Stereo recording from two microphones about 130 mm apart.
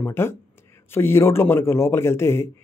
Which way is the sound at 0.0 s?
20° left (ahead or behind).